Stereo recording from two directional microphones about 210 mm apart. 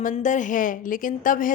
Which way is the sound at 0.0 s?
35° left (ahead or behind).